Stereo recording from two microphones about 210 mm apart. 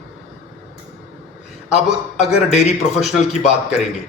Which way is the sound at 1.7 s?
30° left (ahead or behind).